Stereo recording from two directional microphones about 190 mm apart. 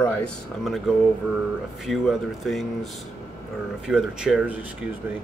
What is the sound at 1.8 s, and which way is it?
Speech, centre (ahead or behind).